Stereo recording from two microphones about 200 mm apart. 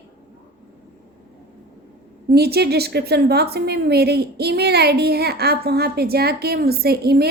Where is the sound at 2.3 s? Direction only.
55° right (ahead or behind).